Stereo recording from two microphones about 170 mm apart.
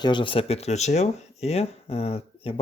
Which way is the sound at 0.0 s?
30° left (ahead or behind).